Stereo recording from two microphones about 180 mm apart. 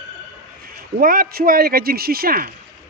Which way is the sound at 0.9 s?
55° right (ahead or behind).